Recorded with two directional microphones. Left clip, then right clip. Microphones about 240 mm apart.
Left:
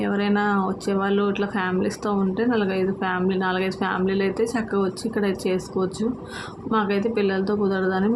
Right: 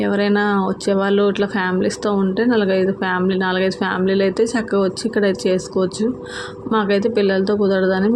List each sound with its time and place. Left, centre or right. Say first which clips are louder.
0.0 s speech: right 5 dB; centre